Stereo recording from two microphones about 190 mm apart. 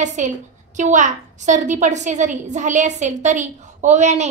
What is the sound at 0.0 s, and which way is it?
A woman's voice, 40° right (ahead or behind).